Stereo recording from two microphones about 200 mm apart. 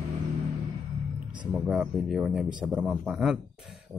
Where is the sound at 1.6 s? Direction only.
5° right (ahead or behind).